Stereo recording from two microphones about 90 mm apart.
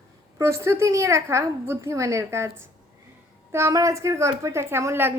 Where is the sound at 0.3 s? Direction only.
35° right (ahead or behind).